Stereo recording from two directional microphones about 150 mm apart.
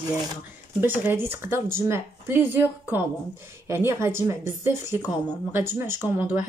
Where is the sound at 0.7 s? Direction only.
15° right (ahead or behind).